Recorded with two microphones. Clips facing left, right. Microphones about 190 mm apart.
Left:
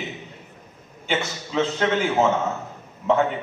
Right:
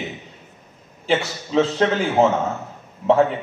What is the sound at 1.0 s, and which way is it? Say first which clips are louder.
Speech: right 5 dB; 35° right (ahead or behind).